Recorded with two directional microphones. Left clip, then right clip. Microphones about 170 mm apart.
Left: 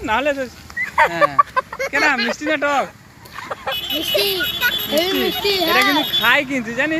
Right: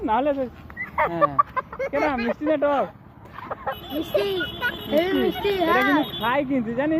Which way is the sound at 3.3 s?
30° left (ahead or behind).